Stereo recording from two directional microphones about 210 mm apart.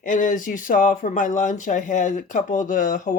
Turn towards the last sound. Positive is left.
turn(degrees=40)  # may be behind; listen again after turning